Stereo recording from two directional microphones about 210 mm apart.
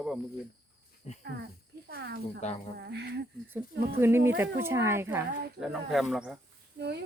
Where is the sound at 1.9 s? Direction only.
55° right (ahead or behind).